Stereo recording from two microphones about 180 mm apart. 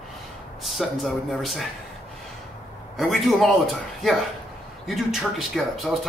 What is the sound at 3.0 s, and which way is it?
Speech, centre (ahead or behind).